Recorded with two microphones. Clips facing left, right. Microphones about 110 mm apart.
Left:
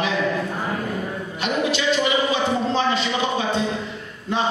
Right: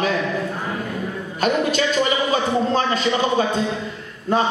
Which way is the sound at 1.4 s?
45° right (ahead or behind).